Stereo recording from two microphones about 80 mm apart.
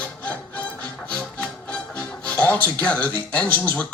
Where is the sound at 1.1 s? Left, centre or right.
Centre.